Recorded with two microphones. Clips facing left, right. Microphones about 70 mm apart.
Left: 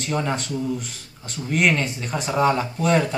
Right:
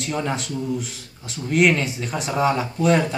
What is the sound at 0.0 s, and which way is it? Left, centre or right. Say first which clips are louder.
Speech: left 1 dB; centre.